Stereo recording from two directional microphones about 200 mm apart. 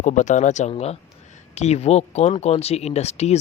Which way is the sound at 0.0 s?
35° left (ahead or behind).